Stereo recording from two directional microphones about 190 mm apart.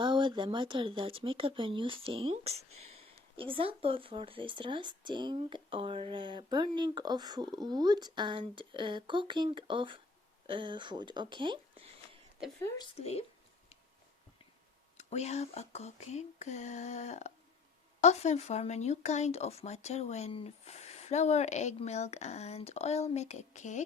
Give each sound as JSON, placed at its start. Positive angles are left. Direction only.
{"t": 0.0, "sound": "speech", "side_deg": -25}
{"t": 12.5, "sound": "speech", "side_deg": 15}
{"t": 13.0, "sound": "speech", "side_deg": 35}
{"t": 14.9, "sound": "speech", "side_deg": 35}